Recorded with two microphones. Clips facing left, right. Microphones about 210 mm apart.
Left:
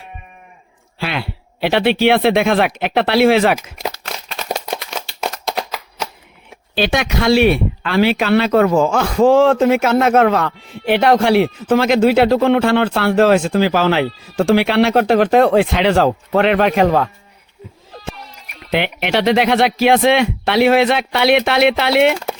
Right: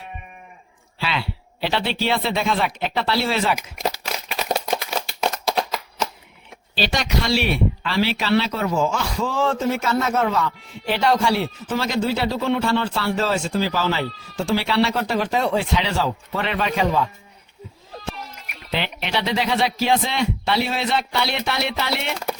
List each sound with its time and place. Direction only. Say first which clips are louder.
0.9 s speech: left 3 dB; 50° left (ahead or behind)
4.3 s a sound: even; centre (ahead or behind)
6.7 s speech: left 6 dB; 55° left (ahead or behind)
18.7 s speech: left 8 dB; 65° left (ahead or behind)